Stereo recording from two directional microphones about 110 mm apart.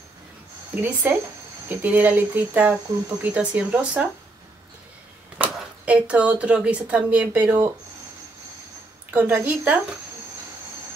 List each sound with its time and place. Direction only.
0.7 s speech: 15° right (ahead or behind)
5.4 s speech: 10° right (ahead or behind)
9.1 s speech: 15° right (ahead or behind)